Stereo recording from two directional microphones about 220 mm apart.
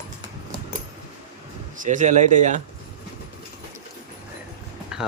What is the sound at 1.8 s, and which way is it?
Speech, 35° right (ahead or behind).